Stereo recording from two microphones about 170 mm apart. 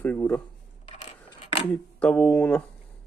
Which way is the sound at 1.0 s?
40° left (ahead or behind).